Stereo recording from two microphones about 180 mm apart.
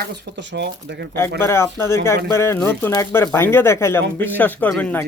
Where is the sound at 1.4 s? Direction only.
15° left (ahead or behind).